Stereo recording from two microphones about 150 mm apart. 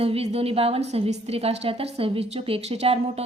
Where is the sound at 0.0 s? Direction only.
40° right (ahead or behind).